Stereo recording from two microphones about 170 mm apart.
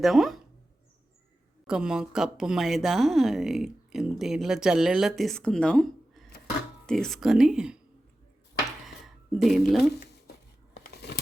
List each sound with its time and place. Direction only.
0.0 s a woman's voice: centre (ahead or behind)
1.6 s a woman's voice: 5° right (ahead or behind)
9.4 s a woman's voice: centre (ahead or behind)
10.8 s a sound: 75° left (ahead or behind)